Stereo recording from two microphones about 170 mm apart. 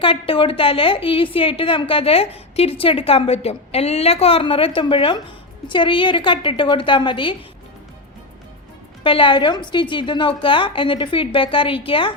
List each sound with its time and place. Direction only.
0.0 s a woman's voice: 30° left (ahead or behind)
9.0 s a woman's voice: 30° left (ahead or behind)